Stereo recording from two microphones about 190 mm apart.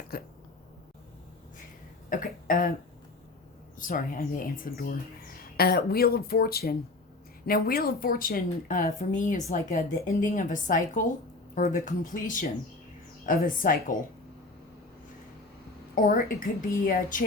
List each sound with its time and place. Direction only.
0.1 s speech: 50° left (ahead or behind)
2.0 s speech: 45° left (ahead or behind)
3.8 s speech: 45° left (ahead or behind)
16.0 s speech: 45° left (ahead or behind)